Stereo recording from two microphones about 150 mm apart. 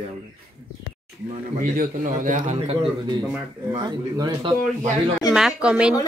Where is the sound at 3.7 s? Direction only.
30° right (ahead or behind).